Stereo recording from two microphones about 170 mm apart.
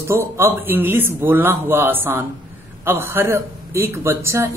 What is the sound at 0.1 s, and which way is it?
Speech, 15° right (ahead or behind).